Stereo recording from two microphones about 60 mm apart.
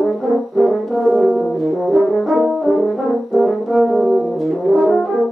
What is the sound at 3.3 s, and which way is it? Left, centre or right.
French horn, centre.